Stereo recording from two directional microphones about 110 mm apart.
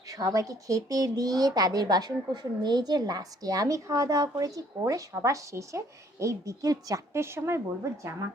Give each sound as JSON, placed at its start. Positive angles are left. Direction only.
{"t": 0.1, "sound": "speech", "side_deg": -35}